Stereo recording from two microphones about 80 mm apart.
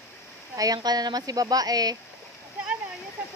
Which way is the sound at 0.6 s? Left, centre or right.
Right.